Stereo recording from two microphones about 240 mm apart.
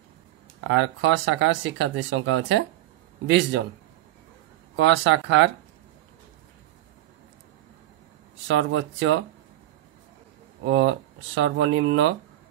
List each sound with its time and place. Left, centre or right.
0.7 s speech: right
4.7 s speech: right
8.5 s speech: right
10.6 s speech: right